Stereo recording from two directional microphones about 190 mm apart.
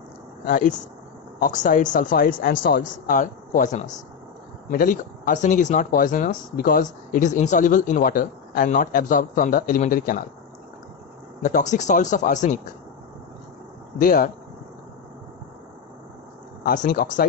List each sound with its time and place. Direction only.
0.5 s speech: 45° left (ahead or behind)
11.4 s speech: 40° left (ahead or behind)
13.9 s speech: 50° left (ahead or behind)
16.6 s speech: 45° left (ahead or behind)